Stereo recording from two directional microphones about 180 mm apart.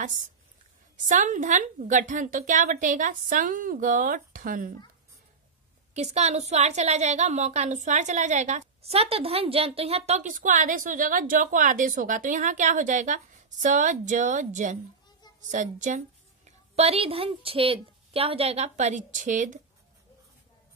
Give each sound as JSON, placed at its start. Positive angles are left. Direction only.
{"t": 0.9, "sound": "a woman's voice", "side_deg": -45}
{"t": 5.9, "sound": "a woman's voice", "side_deg": -40}